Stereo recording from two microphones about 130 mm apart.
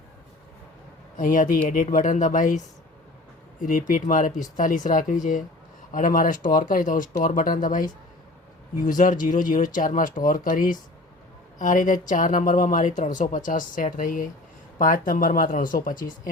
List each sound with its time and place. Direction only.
1.1 s speech: 90° left
3.6 s speech: 90° left